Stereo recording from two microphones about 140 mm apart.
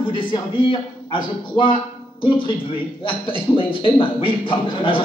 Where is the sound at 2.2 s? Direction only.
35° left (ahead or behind).